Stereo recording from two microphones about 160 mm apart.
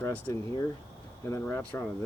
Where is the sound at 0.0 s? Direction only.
15° left (ahead or behind).